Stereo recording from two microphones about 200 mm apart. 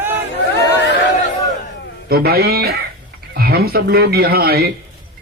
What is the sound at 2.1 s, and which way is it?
Speech, 50° right (ahead or behind).